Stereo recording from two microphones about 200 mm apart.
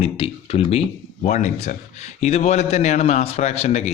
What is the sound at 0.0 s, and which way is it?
Speech, 30° left (ahead or behind).